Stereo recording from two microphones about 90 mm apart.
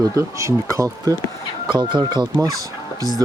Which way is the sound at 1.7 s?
65° right (ahead or behind).